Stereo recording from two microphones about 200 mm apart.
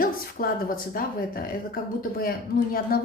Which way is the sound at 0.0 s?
45° left (ahead or behind).